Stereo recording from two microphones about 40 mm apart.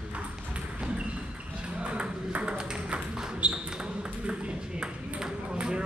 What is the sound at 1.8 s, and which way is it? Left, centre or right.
Ping, right.